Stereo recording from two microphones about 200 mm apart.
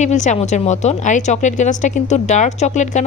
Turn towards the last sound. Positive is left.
turn(degrees=35)  # may be behind; listen again after turning